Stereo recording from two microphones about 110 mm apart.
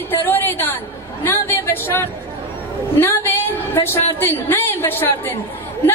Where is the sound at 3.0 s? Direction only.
20° left (ahead or behind).